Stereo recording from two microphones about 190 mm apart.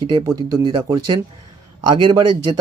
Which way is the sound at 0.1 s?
25° right (ahead or behind).